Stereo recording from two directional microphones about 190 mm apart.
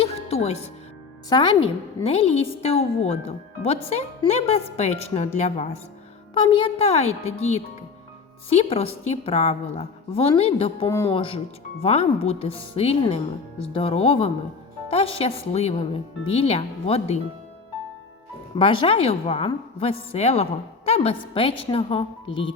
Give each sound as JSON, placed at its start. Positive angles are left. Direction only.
{"t": 0.0, "sound": "music", "side_deg": 30}
{"t": 1.3, "sound": "a woman's voice", "side_deg": 25}
{"t": 6.3, "sound": "a woman's voice", "side_deg": 25}
{"t": 10.8, "sound": "a man's voice", "side_deg": 15}
{"t": 11.1, "sound": "a woman's voice", "side_deg": 30}
{"t": 18.5, "sound": "a woman's voice", "side_deg": 25}